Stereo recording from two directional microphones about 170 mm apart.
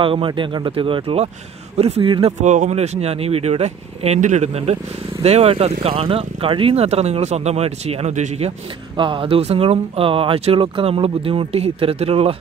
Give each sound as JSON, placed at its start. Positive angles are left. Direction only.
{"t": 0.0, "sound": "speech", "side_deg": -30}
{"t": 2.4, "sound": "speech", "side_deg": -45}